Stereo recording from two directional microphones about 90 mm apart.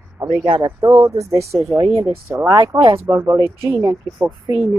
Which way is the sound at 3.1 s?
35° right (ahead or behind).